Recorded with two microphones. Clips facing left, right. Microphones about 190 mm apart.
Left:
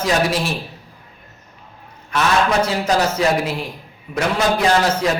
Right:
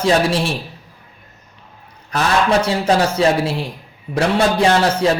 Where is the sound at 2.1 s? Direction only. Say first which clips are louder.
Right 1 dB; 35° right (ahead or behind).